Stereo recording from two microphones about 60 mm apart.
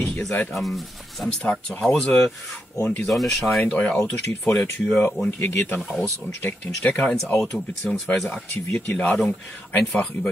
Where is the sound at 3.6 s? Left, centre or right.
Centre.